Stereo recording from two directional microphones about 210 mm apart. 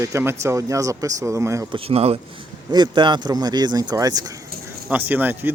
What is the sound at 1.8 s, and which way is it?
Speech, 30° right (ahead or behind).